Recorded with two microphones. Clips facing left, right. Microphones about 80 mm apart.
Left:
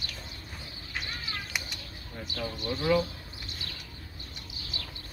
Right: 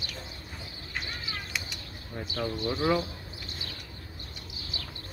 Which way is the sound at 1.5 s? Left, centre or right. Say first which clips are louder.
Left 1 dB; centre.